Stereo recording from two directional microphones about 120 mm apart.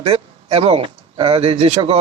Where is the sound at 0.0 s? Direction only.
55° right (ahead or behind).